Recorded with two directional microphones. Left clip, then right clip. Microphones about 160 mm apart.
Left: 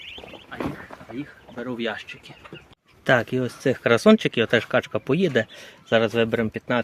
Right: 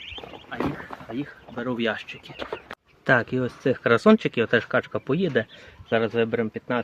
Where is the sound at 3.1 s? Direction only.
15° left (ahead or behind); by 5.5 s 30° left (ahead or behind).